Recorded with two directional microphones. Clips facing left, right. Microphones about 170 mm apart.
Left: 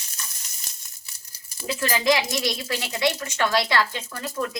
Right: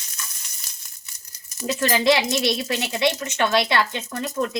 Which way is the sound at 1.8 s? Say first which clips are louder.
Right 3 dB; 25° right (ahead or behind).